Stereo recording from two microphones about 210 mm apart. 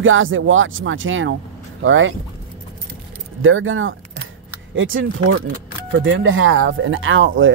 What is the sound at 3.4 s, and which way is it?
Speech, 70° right (ahead or behind).